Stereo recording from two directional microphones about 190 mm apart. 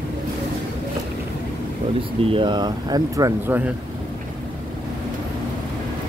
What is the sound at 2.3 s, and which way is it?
Speech, 25° right (ahead or behind).